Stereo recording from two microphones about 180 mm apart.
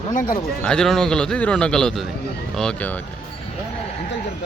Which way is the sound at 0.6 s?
5° left (ahead or behind).